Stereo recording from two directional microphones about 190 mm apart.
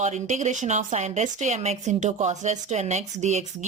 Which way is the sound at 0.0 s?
40° right (ahead or behind).